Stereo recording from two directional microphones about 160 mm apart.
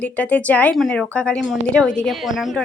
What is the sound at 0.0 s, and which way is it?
Speech, 10° left (ahead or behind).